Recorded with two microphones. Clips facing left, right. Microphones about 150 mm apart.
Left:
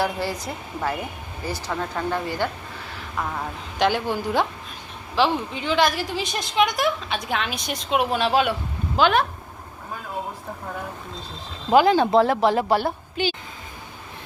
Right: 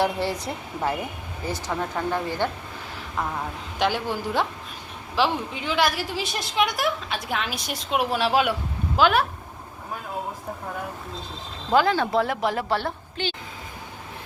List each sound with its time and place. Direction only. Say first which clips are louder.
0.0 s speech: right 1 dB; 25° right (ahead or behind)
1.5 s speech: even; 20° right (ahead or behind)
1.7 s speech: even; 10° right (ahead or behind)
3.8 s a woman's voice: left 3 dB; centre (ahead or behind)
11.7 s speech: left 4 dB; 15° left (ahead or behind)
12.1 s speech: left 5 dB; 30° left (ahead or behind)
12.6 s a woman's voice: left 4 dB; 10° left (ahead or behind)